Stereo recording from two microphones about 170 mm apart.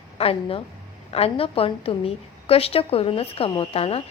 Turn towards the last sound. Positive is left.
turn(degrees=35)  # may be behind; listen again after turning